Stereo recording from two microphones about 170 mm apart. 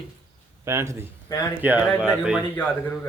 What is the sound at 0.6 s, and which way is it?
Speech, 15° right (ahead or behind).